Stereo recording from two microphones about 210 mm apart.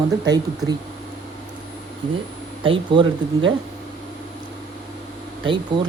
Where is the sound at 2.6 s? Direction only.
25° right (ahead or behind).